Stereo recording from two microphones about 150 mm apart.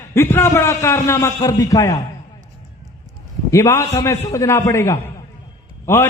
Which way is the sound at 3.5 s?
20° left (ahead or behind).